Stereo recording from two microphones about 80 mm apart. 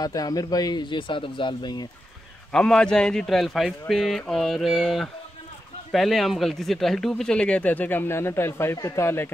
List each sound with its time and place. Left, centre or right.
0.0 s speech: left
2.5 s speech: centre
3.9 s a sound: centre
5.9 s speech: centre; by 9.3 s left